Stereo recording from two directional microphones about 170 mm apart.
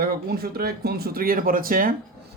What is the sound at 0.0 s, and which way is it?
Speech, 60° right (ahead or behind).